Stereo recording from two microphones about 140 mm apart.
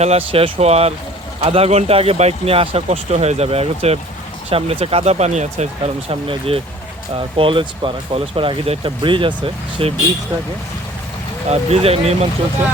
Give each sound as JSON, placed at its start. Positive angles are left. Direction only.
{"t": 0.0, "sound": "speech", "side_deg": -45}
{"t": 11.4, "sound": "speech", "side_deg": -50}